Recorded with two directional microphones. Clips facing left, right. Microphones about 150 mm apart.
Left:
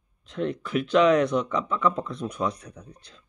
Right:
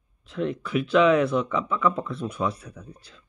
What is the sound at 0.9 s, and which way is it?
Speech, 35° left (ahead or behind).